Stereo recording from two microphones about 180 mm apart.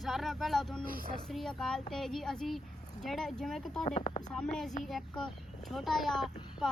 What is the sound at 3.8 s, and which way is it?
Speech, 40° left (ahead or behind).